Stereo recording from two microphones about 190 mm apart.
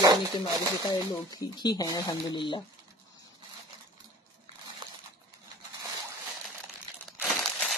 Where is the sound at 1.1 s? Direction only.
20° left (ahead or behind).